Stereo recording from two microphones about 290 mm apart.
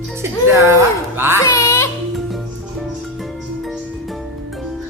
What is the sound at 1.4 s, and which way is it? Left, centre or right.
Music, centre.